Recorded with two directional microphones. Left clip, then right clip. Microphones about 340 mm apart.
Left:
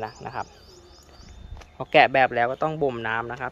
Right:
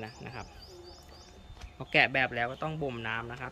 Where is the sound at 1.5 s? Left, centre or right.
Centre.